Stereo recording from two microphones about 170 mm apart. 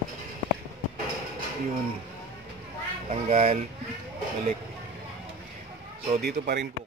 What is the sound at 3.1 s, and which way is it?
Speech, 40° right (ahead or behind).